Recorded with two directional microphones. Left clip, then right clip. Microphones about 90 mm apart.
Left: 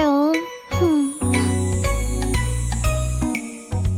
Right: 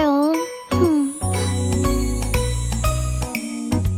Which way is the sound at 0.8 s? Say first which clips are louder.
Even; centre (ahead or behind).